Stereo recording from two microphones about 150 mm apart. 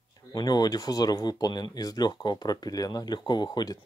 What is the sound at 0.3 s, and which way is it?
Speech, 25° left (ahead or behind).